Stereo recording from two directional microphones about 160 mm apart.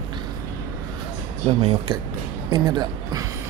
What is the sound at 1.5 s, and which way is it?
Speech, 35° right (ahead or behind).